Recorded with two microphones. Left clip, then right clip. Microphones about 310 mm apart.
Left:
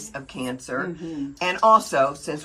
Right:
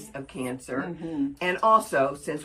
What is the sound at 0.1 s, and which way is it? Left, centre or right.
Speech, left.